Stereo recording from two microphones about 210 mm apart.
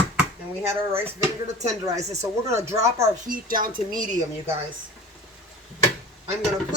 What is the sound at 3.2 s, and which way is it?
Speech, 40° right (ahead or behind).